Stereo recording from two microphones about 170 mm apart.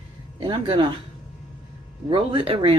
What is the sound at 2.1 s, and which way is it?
Speech, 35° right (ahead or behind).